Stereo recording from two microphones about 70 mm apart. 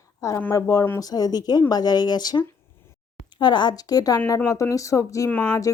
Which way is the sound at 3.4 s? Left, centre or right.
Left.